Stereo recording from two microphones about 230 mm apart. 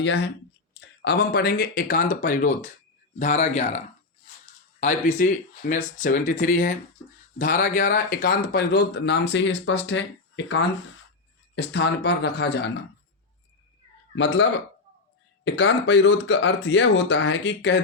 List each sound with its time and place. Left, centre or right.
0.0 s speech: left
4.8 s speech: left
14.2 s speech: left
15.4 s speech: left